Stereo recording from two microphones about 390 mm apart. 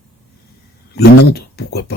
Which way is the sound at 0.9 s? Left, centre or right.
Left.